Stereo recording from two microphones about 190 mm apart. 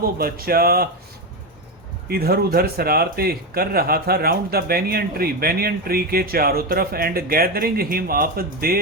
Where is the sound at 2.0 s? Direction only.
55° right (ahead or behind).